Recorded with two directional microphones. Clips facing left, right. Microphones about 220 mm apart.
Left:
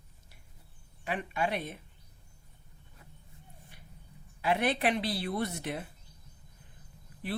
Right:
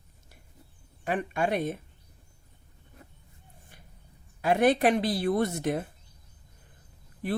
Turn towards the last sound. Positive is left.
turn(degrees=-45)  # may be behind; listen again after turning